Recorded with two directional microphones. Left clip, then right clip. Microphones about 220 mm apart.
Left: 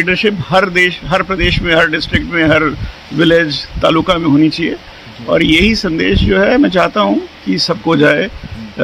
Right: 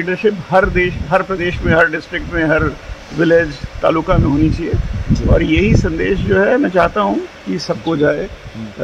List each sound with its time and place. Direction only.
0.0 s speech: 60° left (ahead or behind)